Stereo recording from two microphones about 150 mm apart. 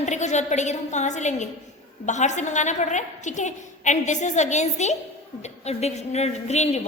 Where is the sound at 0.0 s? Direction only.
50° left (ahead or behind).